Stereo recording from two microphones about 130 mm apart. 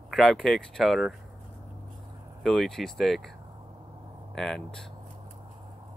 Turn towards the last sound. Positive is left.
turn(degrees=5)  # may be behind; listen again after turning